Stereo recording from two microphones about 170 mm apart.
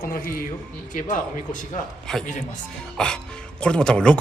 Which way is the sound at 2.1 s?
5° left (ahead or behind).